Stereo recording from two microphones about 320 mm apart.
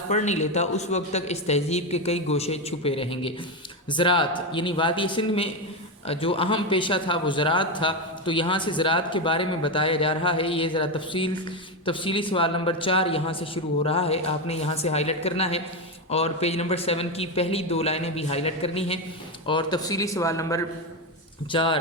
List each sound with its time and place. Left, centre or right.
0.1 s a man's voice: left